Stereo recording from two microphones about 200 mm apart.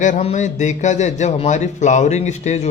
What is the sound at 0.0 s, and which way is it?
A man's voice, 35° left (ahead or behind).